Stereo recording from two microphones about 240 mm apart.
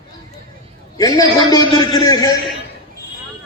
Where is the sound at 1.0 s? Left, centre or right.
Centre.